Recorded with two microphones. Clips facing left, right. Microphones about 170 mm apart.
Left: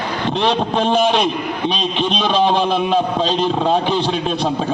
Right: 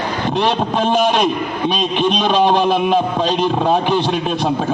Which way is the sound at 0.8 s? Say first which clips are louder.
Right 1 dB; 50° right (ahead or behind).